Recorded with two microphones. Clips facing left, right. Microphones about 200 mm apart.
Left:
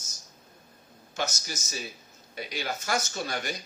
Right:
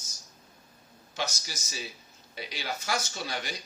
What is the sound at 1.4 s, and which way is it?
Speech, 45° left (ahead or behind).